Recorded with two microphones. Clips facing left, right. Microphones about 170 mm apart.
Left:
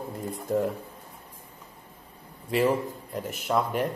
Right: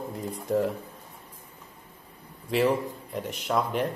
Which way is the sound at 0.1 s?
Centre (ahead or behind).